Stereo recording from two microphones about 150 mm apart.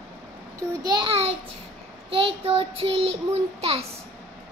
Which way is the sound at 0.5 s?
30° right (ahead or behind).